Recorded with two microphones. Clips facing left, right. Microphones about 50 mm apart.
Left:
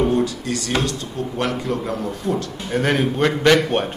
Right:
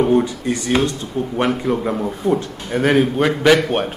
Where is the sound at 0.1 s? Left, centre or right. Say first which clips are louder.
Right 4 dB; right.